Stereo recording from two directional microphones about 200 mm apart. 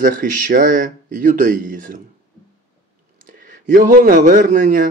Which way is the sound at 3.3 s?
40° right (ahead or behind).